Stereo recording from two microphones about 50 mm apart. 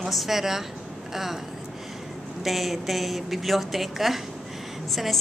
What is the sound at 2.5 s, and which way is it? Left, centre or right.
A woman's voice, centre.